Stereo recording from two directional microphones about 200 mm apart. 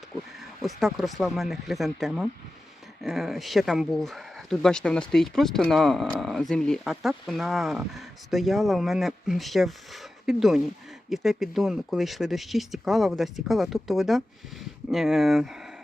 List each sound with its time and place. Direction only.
0.6 s speech: centre (ahead or behind)